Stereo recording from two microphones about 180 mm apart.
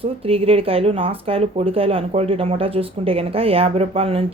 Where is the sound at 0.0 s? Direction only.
30° right (ahead or behind).